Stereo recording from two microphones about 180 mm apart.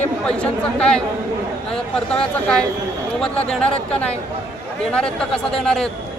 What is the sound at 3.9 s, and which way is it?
Speech, 5° left (ahead or behind).